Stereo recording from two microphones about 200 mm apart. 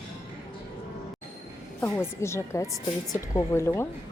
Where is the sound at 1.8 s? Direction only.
15° left (ahead or behind).